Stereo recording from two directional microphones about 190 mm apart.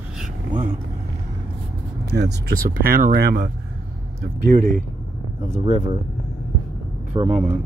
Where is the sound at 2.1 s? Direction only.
65° right (ahead or behind).